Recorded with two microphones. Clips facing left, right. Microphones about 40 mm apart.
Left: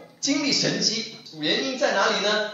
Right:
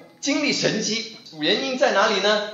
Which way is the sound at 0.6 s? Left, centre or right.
Centre.